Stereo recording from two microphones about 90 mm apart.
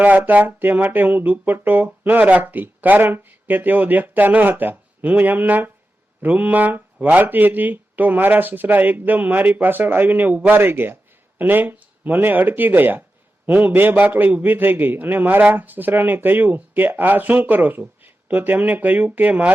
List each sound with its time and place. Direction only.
0.0 s a man's voice: 20° right (ahead or behind)